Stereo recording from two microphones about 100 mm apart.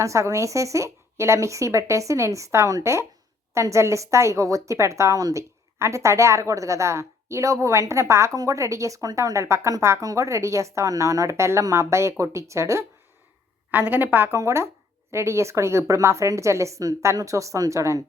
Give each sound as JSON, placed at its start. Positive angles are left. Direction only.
{"t": 0.0, "sound": "a woman's voice", "side_deg": -30}
{"t": 13.7, "sound": "a woman's voice", "side_deg": -20}